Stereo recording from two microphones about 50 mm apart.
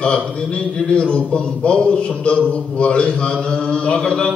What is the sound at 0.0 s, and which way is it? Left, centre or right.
A man's voice, centre.